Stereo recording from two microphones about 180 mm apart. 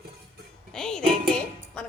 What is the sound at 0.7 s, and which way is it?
Speech, 5° left (ahead or behind).